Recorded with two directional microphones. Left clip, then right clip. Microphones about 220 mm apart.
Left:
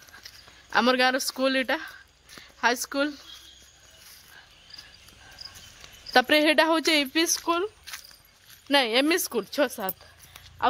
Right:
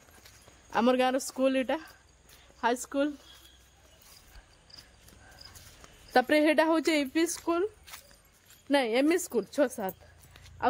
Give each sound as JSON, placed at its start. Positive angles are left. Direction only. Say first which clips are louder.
{"t": 0.7, "sound": "a woman's voice", "louder": "left 4 dB", "side_deg": 0}
{"t": 6.1, "sound": "a woman's voice", "louder": "left 4 dB", "side_deg": 15}